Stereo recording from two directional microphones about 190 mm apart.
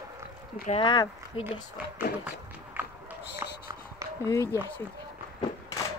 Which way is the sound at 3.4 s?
15° right (ahead or behind).